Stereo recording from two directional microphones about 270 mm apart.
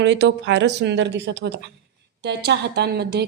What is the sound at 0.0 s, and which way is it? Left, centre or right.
Speech, right.